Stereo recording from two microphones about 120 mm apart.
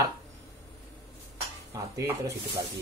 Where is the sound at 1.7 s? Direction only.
25° right (ahead or behind).